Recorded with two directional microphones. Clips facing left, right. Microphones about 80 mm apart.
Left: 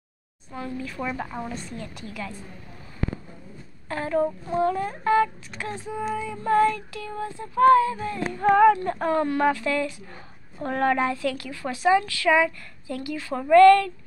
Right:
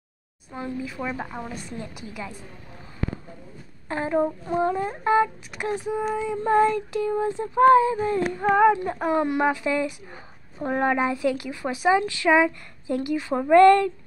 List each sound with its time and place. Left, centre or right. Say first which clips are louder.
0.5 s speech: right 1 dB; centre
3.9 s child singing: right 1 dB; right
5.6 s speech: right 5 dB; centre
6.1 s child singing: even; right
8.5 s speech: left 1 dB; centre
12.0 s child singing: right 2 dB; right